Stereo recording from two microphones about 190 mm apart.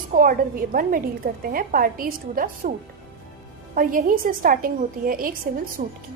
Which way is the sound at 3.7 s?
45° right (ahead or behind).